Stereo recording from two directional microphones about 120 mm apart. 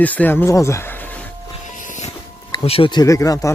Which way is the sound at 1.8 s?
90° left.